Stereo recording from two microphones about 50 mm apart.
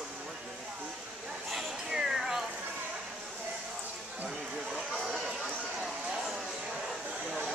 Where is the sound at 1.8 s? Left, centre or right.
Centre.